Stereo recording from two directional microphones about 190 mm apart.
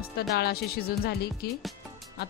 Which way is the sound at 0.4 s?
55° left (ahead or behind).